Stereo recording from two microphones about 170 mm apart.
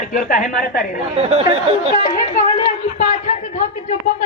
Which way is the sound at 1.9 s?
50° left (ahead or behind).